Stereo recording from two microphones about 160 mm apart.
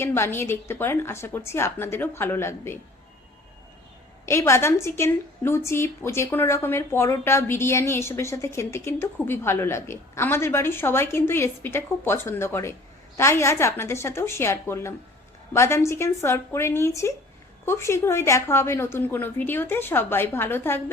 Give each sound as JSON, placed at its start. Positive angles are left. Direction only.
{"t": 0.0, "sound": "a woman's voice", "side_deg": 15}
{"t": 4.3, "sound": "a woman's voice", "side_deg": 15}